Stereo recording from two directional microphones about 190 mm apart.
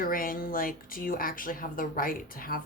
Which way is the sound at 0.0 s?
50° left (ahead or behind).